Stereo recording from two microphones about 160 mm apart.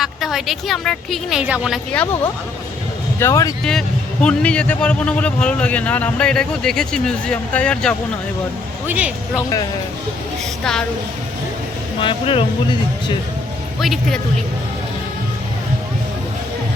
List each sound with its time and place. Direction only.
0.0 s a woman's voice: centre (ahead or behind)
1.9 s speech: 10° left (ahead or behind)
3.2 s speech: 20° left (ahead or behind)
3.6 s speech: 5° left (ahead or behind)
8.9 s speech: 10° right (ahead or behind)
10.6 s a woman's voice: 5° left (ahead or behind)
11.9 s speech: 35° left (ahead or behind)
13.7 s a woman's voice: centre (ahead or behind)